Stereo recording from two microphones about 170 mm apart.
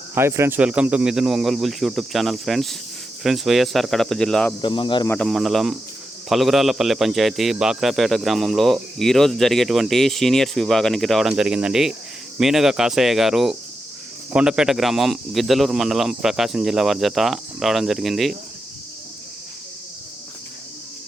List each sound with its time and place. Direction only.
0.1 s a man's voice: 15° right (ahead or behind); by 4.5 s 5° left (ahead or behind)
4.6 s speech: 30° left (ahead or behind)
5.0 s a man's voice: 5° left (ahead or behind)